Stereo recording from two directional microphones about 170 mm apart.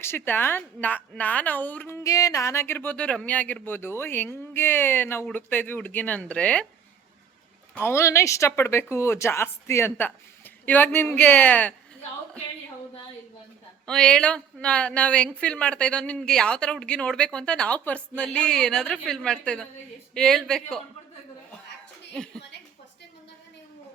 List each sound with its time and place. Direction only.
0.0 s a woman's voice: 15° left (ahead or behind)
7.8 s a woman's voice: 15° left (ahead or behind)
13.8 s a woman's voice: 5° left (ahead or behind)